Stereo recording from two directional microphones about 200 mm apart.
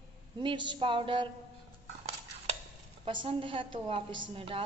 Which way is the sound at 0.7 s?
25° right (ahead or behind).